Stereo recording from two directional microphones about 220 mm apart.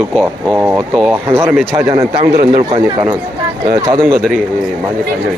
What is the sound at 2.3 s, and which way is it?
Speech, 40° right (ahead or behind).